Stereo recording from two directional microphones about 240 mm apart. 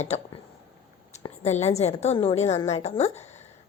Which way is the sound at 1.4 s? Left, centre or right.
Left.